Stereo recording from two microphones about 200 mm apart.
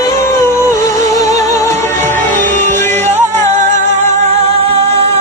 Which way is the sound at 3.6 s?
35° right (ahead or behind).